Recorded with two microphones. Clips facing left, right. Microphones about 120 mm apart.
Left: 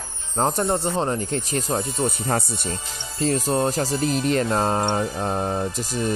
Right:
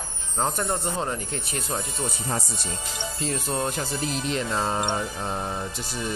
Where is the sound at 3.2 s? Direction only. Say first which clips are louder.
Left 7 dB; 40° left (ahead or behind).